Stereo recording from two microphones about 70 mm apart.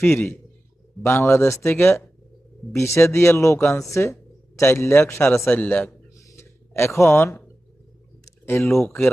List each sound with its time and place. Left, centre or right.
0.0 s speech: left
2.7 s speech: left
5.5 s a man's voice: left
6.1 s a sound: left
8.4 s speech: left